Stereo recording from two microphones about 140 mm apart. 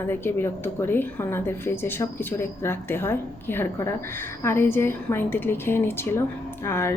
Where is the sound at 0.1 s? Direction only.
15° left (ahead or behind).